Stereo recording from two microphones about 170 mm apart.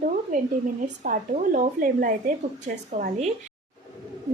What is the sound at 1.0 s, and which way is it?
A woman's voice, 50° right (ahead or behind).